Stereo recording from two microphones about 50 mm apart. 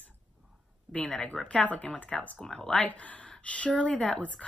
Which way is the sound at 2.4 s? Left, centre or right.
Centre.